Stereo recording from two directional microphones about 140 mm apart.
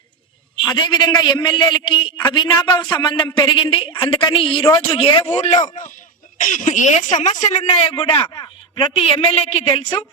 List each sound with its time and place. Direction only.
0.7 s a man's voice: 30° left (ahead or behind)
5.3 s a woman's voice: 55° left (ahead or behind)
6.4 s speech: 65° left (ahead or behind)
7.9 s a sound: 35° left (ahead or behind)
9.0 s a woman's voice: 45° left (ahead or behind)